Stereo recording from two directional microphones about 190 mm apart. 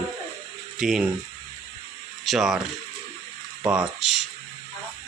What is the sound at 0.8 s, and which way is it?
Speech, 5° right (ahead or behind).